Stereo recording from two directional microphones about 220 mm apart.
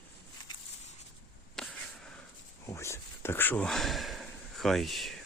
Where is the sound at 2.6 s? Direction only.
15° left (ahead or behind).